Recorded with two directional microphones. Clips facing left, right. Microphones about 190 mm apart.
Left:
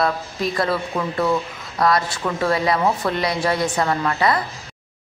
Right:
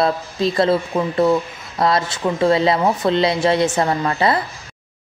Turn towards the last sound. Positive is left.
turn(degrees=-25)  # may be behind; listen again after turning